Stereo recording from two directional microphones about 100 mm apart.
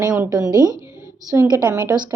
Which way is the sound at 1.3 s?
25° right (ahead or behind).